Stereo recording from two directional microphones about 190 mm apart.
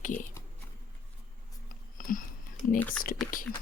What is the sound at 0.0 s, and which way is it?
Speech, 45° left (ahead or behind).